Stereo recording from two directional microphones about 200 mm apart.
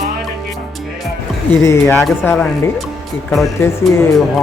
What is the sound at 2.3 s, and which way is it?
Speech, centre (ahead or behind).